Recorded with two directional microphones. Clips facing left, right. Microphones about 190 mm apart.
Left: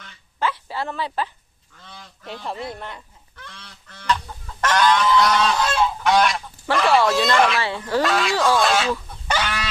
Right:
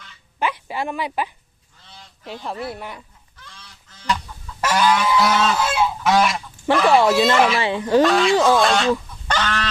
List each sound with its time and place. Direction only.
0.3 s a sound: 15° right (ahead or behind)
2.2 s speech: centre (ahead or behind)
3.3 s goose: 60° left (ahead or behind)
4.6 s goose: 10° right (ahead or behind)
6.9 s speech: 10° right (ahead or behind)
7.6 s speech: 20° right (ahead or behind)
8.0 s speech: centre (ahead or behind)
9.2 s chicken: 10° left (ahead or behind)